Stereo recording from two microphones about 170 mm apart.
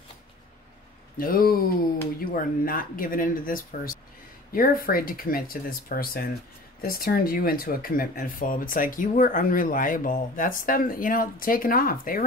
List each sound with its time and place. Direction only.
1.1 s speech: 55° left (ahead or behind)